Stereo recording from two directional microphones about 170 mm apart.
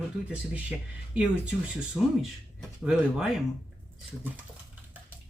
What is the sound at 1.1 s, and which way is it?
Speech, 5° right (ahead or behind).